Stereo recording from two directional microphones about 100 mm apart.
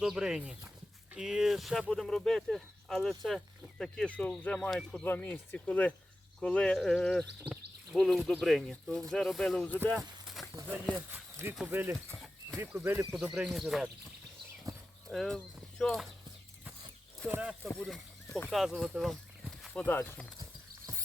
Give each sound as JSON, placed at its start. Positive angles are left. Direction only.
{"t": 0.0, "sound": "speech", "side_deg": -5}
{"t": 5.0, "sound": "speech", "side_deg": 20}
{"t": 9.6, "sound": "speech", "side_deg": 15}
{"t": 10.4, "sound": "a sound", "side_deg": 0}
{"t": 11.6, "sound": "speech", "side_deg": -20}
{"t": 13.1, "sound": "speech", "side_deg": -10}
{"t": 15.1, "sound": "speech", "side_deg": 0}
{"t": 17.2, "sound": "speech", "side_deg": -20}
{"t": 17.7, "sound": "speech", "side_deg": 0}
{"t": 18.3, "sound": "speech", "side_deg": 20}
{"t": 18.5, "sound": "speech", "side_deg": 0}
{"t": 19.7, "sound": "speech", "side_deg": 15}